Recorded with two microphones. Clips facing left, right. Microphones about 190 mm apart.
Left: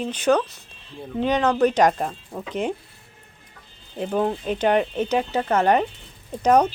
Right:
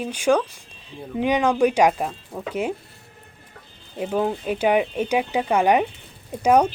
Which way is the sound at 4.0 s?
5° right (ahead or behind).